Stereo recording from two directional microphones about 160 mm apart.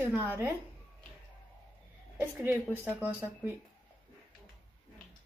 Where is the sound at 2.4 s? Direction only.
10° right (ahead or behind).